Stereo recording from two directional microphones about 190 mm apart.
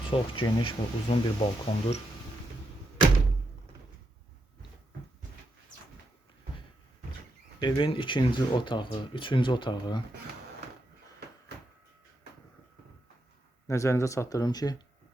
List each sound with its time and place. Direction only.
0.1 s speech: 30° left (ahead or behind)
7.6 s speech: 25° left (ahead or behind)
13.7 s speech: 15° left (ahead or behind)